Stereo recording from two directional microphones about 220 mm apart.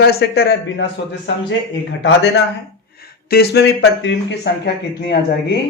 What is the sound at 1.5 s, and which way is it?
Speech, 55° left (ahead or behind).